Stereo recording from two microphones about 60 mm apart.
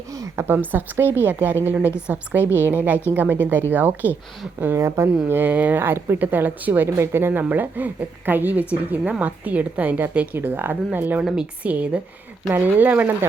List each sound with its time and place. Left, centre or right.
0.4 s a woman's voice: right
4.8 s speech: right
5.3 s a woman's voice: right
5.8 s a woman's voice: right
10.3 s a woman's voice: right